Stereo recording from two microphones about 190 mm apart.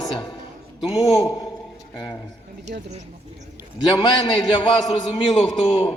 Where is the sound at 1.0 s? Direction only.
Centre (ahead or behind).